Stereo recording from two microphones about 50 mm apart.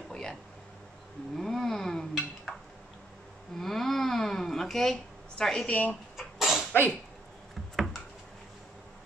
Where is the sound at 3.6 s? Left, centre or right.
Centre.